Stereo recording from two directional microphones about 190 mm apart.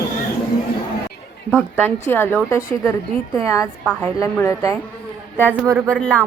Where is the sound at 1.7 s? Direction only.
10° left (ahead or behind).